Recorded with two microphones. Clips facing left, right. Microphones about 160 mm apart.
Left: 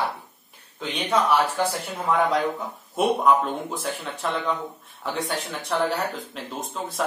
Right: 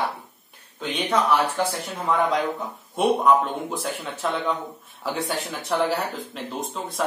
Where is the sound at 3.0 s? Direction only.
Centre (ahead or behind).